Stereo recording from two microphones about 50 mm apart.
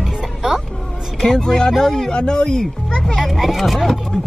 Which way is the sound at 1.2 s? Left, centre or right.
Centre.